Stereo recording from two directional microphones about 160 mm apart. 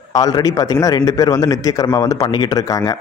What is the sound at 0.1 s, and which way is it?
A man's voice, 25° left (ahead or behind).